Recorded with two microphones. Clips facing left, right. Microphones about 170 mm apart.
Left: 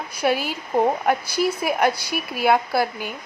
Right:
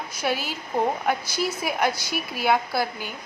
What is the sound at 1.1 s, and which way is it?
A woman's voice, 55° left (ahead or behind).